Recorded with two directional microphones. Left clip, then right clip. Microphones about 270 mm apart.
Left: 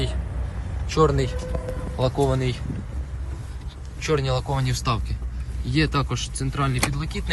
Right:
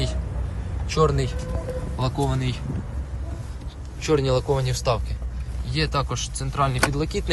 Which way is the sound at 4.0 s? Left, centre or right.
Centre.